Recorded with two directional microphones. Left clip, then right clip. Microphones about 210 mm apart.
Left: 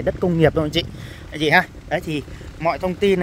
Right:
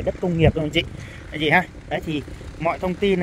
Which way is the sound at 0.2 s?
35° left (ahead or behind).